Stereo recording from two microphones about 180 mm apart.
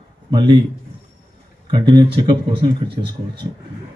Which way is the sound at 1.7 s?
25° right (ahead or behind).